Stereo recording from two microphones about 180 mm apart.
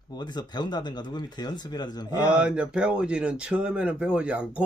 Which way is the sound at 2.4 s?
5° right (ahead or behind).